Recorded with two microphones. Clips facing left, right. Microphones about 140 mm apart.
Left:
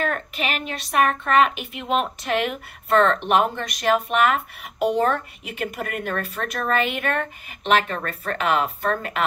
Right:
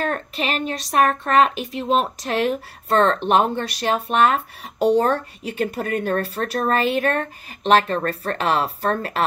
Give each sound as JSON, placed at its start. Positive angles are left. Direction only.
{"t": 0.0, "sound": "speech", "side_deg": -35}